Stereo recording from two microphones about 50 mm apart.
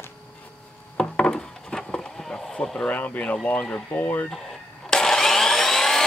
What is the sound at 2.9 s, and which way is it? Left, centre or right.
Speech, left.